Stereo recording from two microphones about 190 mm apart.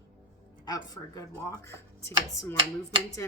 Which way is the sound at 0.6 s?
20° left (ahead or behind).